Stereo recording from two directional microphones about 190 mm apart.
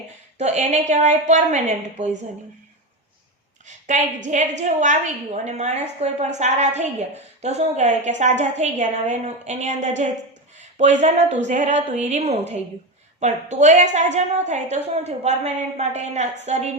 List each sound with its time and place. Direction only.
0.3 s a woman's voice: 35° right (ahead or behind)
3.7 s a woman's voice: 40° right (ahead or behind)
10.6 s a sound: 40° right (ahead or behind)
11.0 s a woman's voice: 35° right (ahead or behind)